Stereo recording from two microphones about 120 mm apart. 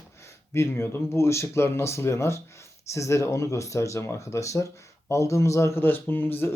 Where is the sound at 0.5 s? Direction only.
20° left (ahead or behind).